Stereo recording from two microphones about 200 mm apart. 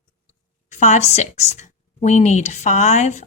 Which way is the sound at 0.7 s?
35° left (ahead or behind).